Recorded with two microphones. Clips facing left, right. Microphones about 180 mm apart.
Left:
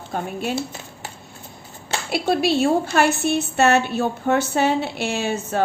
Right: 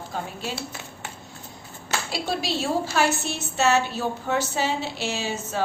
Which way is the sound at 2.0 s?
60° left (ahead or behind).